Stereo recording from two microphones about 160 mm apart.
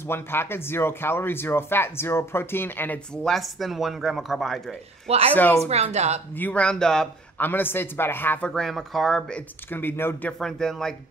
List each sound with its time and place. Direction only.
0.1 s speech: 15° left (ahead or behind)
3.3 s speech: centre (ahead or behind)
5.0 s speech: 40° right (ahead or behind)
5.3 s speech: 10° left (ahead or behind)
5.7 s a woman's voice: 45° right (ahead or behind)
6.3 s speech: 10° left (ahead or behind)
9.7 s speech: 15° left (ahead or behind)
10.4 s speech: 5° left (ahead or behind)